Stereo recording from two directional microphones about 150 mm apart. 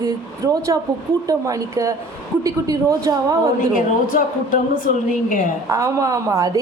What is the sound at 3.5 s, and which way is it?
A woman's voice, 65° left (ahead or behind).